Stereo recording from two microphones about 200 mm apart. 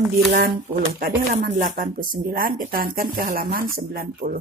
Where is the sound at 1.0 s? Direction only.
45° right (ahead or behind).